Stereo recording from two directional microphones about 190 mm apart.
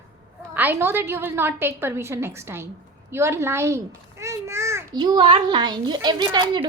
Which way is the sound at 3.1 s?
15° right (ahead or behind).